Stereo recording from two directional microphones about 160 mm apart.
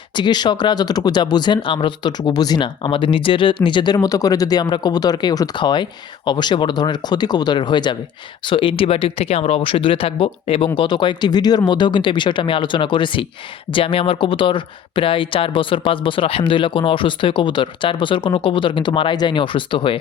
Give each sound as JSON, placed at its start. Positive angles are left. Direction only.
{"t": 0.2, "sound": "speech", "side_deg": 25}